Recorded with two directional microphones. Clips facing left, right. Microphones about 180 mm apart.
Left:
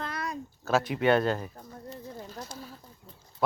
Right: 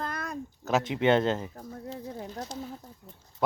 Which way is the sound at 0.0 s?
50° right (ahead or behind).